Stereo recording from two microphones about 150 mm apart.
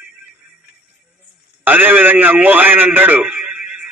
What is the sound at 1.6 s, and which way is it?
A man's voice, 10° right (ahead or behind).